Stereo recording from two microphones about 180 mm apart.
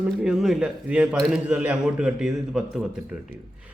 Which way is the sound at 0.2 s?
5° right (ahead or behind).